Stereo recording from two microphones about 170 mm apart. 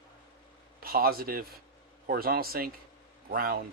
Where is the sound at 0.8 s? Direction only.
60° right (ahead or behind).